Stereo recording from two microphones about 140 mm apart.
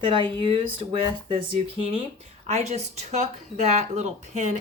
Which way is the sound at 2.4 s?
50° right (ahead or behind).